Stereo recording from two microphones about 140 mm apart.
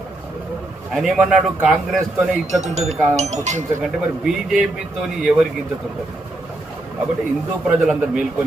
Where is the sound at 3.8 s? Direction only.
5° right (ahead or behind).